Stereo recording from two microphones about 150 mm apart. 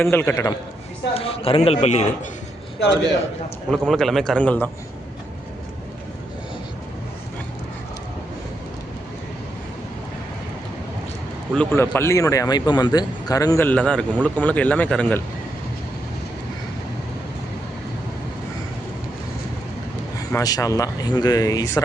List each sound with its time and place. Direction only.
0.0 s a man's voice: 15° left (ahead or behind)
1.1 s a man's voice: 40° left (ahead or behind)
3.7 s a man's voice: 5° left (ahead or behind)
11.5 s a man's voice: 10° left (ahead or behind)
13.7 s a man's voice: 5° left (ahead or behind)
20.3 s a man's voice: 25° left (ahead or behind)